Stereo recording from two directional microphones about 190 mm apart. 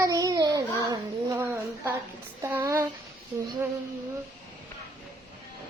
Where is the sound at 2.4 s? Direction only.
15° right (ahead or behind).